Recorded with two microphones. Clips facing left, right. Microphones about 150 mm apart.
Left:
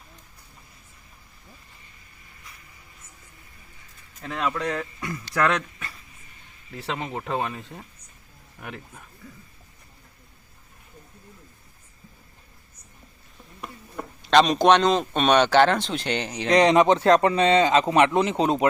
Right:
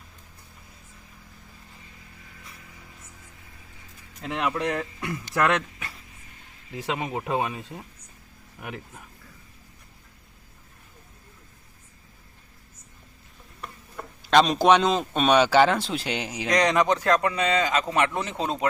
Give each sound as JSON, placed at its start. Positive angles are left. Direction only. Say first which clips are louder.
{"t": 4.2, "sound": "speech", "louder": "right 1 dB", "side_deg": -15}
{"t": 14.2, "sound": "a man's voice", "louder": "left 1 dB", "side_deg": 0}
{"t": 16.5, "sound": "speech", "louder": "left 5 dB", "side_deg": 25}